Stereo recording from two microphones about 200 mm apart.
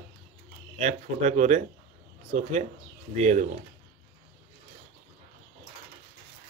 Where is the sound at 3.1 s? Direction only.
35° right (ahead or behind).